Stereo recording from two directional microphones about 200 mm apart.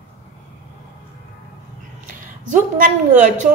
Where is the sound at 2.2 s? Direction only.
40° right (ahead or behind).